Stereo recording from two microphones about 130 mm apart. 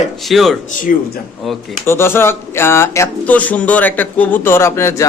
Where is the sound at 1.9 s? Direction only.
20° left (ahead or behind).